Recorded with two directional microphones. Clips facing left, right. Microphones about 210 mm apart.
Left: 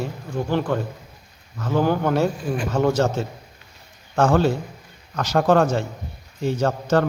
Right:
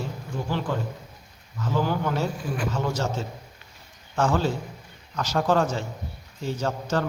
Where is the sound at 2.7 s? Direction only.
70° left (ahead or behind).